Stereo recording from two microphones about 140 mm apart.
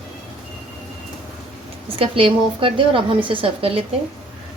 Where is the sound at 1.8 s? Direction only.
40° right (ahead or behind).